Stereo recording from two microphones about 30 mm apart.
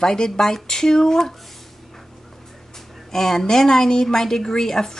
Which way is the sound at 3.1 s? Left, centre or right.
Centre.